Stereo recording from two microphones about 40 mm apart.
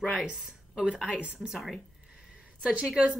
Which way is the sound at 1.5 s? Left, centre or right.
Centre.